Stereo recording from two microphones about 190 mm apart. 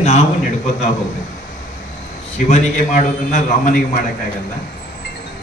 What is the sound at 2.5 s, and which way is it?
A man's voice, 40° left (ahead or behind).